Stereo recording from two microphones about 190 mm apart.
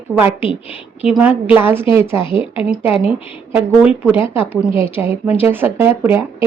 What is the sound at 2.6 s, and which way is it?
A woman's voice, 5° right (ahead or behind).